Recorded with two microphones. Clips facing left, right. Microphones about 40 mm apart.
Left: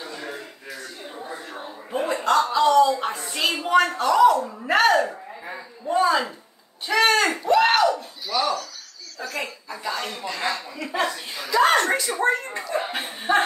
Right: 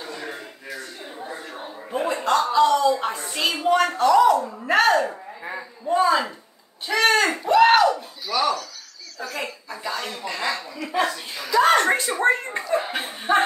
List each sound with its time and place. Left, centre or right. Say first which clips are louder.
1.1 s a sound: right 1 dB; centre
3.0 s a woman's voice: even; centre
11.7 s speech: right 2 dB; right
12.9 s a woman's voice: right 1 dB; centre